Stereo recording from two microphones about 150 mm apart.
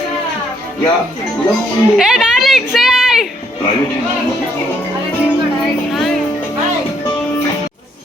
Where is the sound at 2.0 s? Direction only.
5° right (ahead or behind).